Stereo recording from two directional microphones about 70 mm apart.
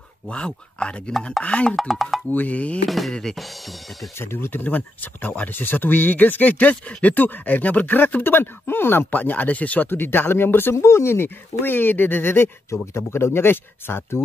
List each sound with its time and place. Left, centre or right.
0.3 s speech: centre
1.8 s speech: centre
2.3 s speech: left
2.9 s speech: centre
4.2 s speech: left